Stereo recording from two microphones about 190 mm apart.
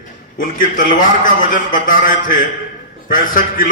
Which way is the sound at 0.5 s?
45° left (ahead or behind).